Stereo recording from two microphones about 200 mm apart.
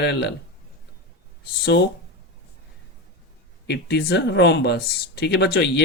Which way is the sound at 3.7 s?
55° left (ahead or behind).